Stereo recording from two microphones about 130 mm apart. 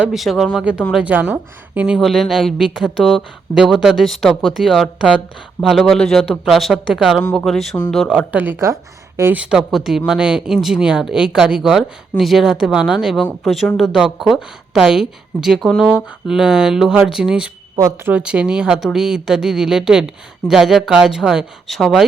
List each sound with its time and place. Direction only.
0.0 s speech: centre (ahead or behind)
2.0 s speech: centre (ahead or behind)
8.0 s speech: 15° left (ahead or behind)
8.3 s a woman's voice: 15° right (ahead or behind)
9.3 s speech: 10° right (ahead or behind)
17.7 s speech: 30° right (ahead or behind)
18.1 s speech: 10° right (ahead or behind)